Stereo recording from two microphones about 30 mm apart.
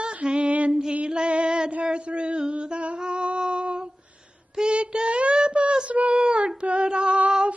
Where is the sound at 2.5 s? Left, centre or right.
Right.